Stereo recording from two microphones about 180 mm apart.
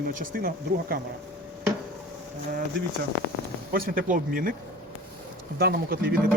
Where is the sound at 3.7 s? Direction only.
55° right (ahead or behind).